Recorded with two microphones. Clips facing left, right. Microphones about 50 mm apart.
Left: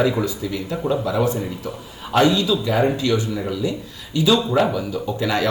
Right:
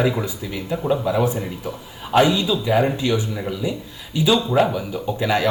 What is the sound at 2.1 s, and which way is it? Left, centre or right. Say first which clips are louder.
A man's voice: even; centre.